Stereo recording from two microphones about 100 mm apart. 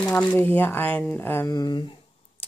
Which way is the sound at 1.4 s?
40° left (ahead or behind).